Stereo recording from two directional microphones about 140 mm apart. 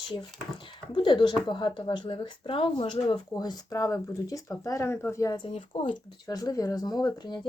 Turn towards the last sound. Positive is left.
turn(degrees=30)  # may be behind; listen again after turning